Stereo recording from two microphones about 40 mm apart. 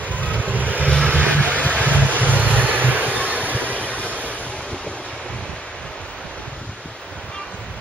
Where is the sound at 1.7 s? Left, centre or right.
Right.